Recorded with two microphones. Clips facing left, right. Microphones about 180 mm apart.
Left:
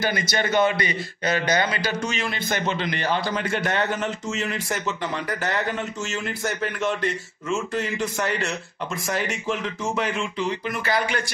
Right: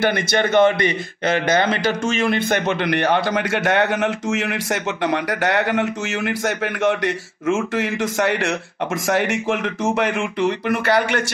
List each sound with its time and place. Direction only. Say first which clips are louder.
0.0 s a man's voice: right 6 dB; 55° right (ahead or behind)